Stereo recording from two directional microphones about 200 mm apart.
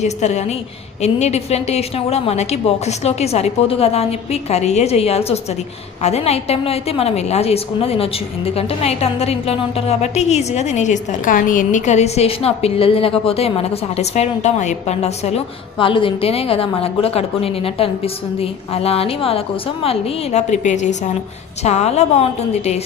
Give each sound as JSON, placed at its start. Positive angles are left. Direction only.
{"t": 0.0, "sound": "a woman's voice", "side_deg": 35}